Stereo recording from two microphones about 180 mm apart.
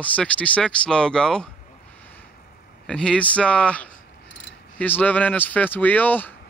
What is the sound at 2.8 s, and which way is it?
Speech, 5° left (ahead or behind).